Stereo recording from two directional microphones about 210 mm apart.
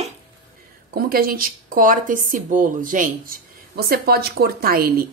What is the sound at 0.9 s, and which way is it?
Speech, 45° right (ahead or behind).